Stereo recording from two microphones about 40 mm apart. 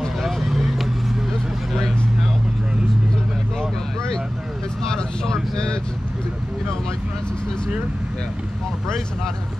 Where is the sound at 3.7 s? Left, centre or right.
Centre.